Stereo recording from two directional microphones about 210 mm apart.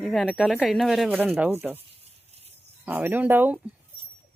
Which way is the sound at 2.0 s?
30° right (ahead or behind).